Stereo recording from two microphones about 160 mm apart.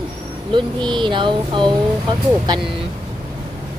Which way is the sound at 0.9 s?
30° right (ahead or behind).